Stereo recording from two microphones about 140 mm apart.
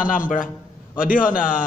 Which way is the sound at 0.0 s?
75° left (ahead or behind).